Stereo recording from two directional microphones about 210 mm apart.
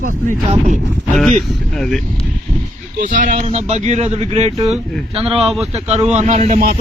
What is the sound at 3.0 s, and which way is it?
A man's voice, 40° right (ahead or behind).